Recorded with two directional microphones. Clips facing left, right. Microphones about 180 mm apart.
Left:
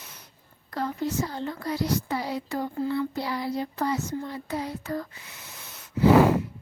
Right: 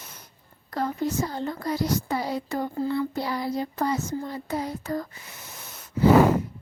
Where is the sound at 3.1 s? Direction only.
45° right (ahead or behind).